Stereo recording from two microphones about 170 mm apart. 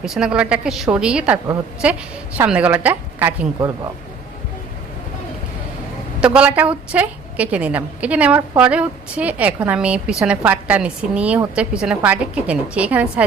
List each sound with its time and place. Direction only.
0.0 s a woman's voice: 5° right (ahead or behind)
6.1 s a woman's voice: 5° right (ahead or behind)